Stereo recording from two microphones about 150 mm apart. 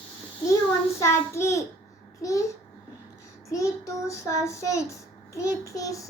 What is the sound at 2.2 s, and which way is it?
Child singing, 20° left (ahead or behind).